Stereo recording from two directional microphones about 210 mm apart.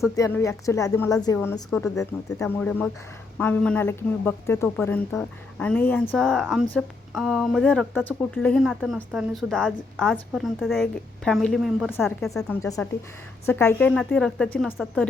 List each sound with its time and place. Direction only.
0.2 s a woman's voice: 10° left (ahead or behind)
12.6 s a woman's voice: 15° left (ahead or behind)